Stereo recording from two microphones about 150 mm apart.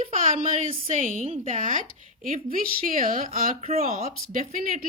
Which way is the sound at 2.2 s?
70° right (ahead or behind).